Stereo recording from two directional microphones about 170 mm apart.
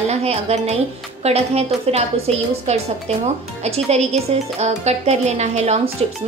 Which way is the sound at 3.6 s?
40° right (ahead or behind).